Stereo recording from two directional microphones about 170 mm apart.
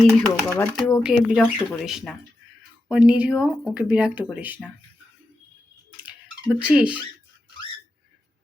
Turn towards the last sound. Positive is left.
turn(degrees=-5)  # may be behind; listen again after turning